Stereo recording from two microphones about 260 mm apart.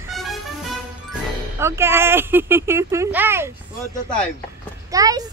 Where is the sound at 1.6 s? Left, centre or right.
Centre.